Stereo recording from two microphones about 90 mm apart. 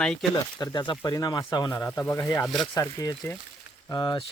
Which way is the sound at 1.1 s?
45° left (ahead or behind).